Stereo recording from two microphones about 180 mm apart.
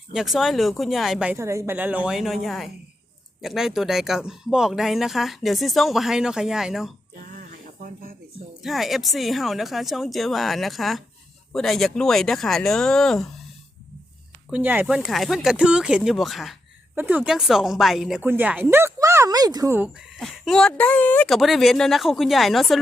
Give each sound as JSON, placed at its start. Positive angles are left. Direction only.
{"t": 0.1, "sound": "speech", "side_deg": 0}
{"t": 7.2, "sound": "a sound", "side_deg": -50}
{"t": 8.6, "sound": "speech", "side_deg": 0}
{"t": 14.5, "sound": "speech", "side_deg": -10}
{"t": 20.1, "sound": "speech", "side_deg": 0}